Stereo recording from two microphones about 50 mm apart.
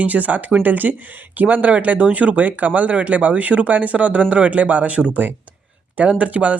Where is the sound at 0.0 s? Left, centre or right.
Right.